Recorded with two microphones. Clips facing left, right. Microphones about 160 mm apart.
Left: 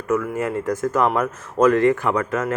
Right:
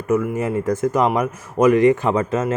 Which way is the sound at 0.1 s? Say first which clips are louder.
Right 2 dB; 20° right (ahead or behind).